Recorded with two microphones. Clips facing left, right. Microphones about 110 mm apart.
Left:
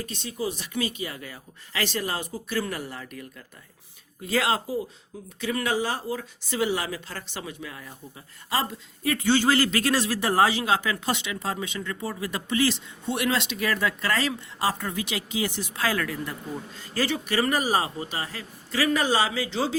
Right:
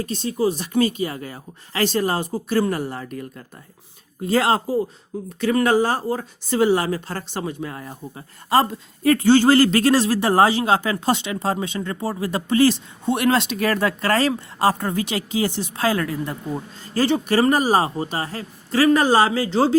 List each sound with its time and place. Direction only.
0.0 s speech: 35° right (ahead or behind)